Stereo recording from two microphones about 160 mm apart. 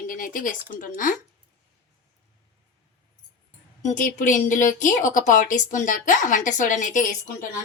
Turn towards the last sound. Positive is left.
turn(degrees=55)  # may be behind; listen again after turning